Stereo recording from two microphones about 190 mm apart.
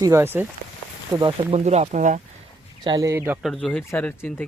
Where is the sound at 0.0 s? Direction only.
15° right (ahead or behind).